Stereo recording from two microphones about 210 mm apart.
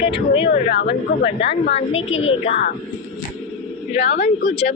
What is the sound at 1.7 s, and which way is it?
Speech, 30° left (ahead or behind).